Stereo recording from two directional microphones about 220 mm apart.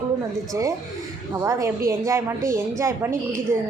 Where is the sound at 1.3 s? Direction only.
15° right (ahead or behind).